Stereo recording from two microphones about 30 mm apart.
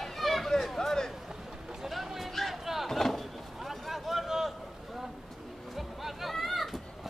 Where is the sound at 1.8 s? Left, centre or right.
Centre.